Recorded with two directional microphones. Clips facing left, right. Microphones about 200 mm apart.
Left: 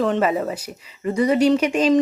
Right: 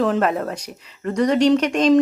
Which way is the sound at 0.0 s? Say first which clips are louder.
Even; centre (ahead or behind).